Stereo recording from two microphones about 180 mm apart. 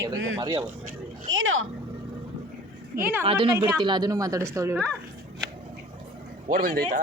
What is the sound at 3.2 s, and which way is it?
Speech, 30° right (ahead or behind).